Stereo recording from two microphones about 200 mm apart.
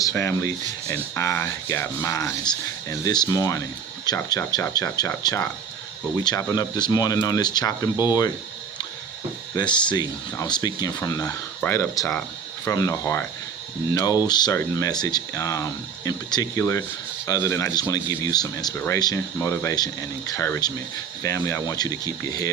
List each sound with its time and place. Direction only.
0.0 s speech: 15° left (ahead or behind)
9.6 s speech: 20° left (ahead or behind)